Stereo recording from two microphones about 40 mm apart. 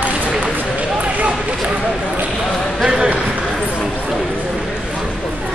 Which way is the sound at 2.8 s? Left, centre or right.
Right.